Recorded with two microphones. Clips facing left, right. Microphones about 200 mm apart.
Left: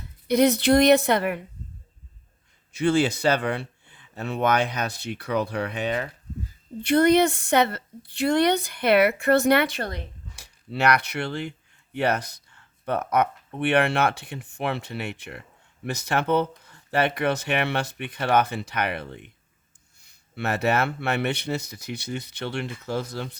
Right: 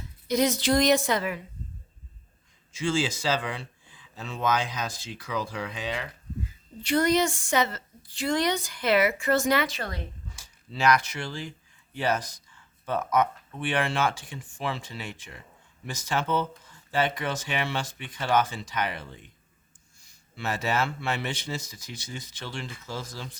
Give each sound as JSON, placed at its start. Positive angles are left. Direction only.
{"t": 0.3, "sound": "speech", "side_deg": 60}
{"t": 2.7, "sound": "speech", "side_deg": 60}